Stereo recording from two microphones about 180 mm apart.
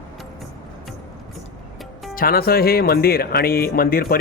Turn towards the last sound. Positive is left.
turn(degrees=55)  # may be behind; listen again after turning